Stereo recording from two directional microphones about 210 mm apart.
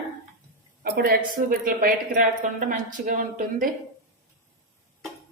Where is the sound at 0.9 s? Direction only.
45° right (ahead or behind).